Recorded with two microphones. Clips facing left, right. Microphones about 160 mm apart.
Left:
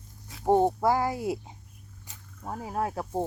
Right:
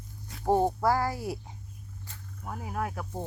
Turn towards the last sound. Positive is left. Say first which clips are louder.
# left 4 dB
turn(degrees=30)  # may be behind; listen again after turning